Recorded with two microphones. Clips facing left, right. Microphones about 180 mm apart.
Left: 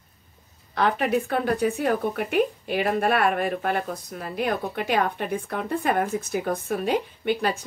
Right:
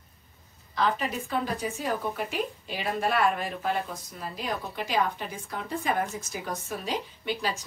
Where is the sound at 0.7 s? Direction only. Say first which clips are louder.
Left 6 dB; 65° left (ahead or behind).